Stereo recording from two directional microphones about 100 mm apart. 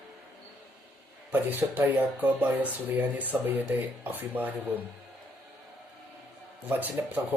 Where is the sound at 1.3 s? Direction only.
15° right (ahead or behind).